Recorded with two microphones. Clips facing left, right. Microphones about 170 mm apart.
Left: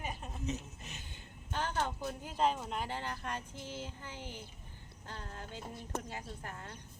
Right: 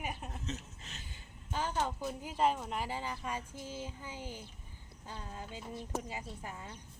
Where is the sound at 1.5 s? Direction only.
10° right (ahead or behind).